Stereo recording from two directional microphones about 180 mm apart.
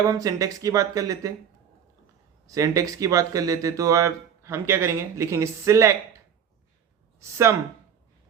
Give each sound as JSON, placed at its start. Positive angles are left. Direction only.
{"t": 0.1, "sound": "speech", "side_deg": -20}
{"t": 2.5, "sound": "speech", "side_deg": -20}
{"t": 7.2, "sound": "speech", "side_deg": -15}